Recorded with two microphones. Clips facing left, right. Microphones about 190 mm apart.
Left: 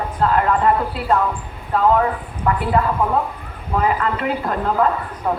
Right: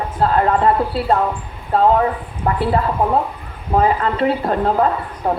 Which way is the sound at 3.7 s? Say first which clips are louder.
Right 4 dB; 30° right (ahead or behind).